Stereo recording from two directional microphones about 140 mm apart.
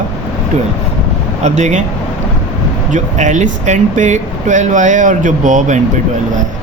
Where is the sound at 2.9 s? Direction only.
60° right (ahead or behind).